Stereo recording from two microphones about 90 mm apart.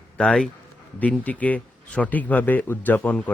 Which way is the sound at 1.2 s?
15° left (ahead or behind).